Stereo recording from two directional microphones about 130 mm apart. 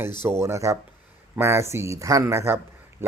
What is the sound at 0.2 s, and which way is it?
A man's voice, 20° right (ahead or behind).